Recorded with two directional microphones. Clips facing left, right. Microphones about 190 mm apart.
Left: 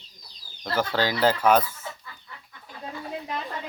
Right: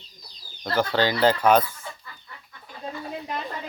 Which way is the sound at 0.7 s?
5° left (ahead or behind).